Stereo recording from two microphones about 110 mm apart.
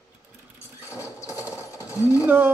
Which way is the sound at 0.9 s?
30° left (ahead or behind).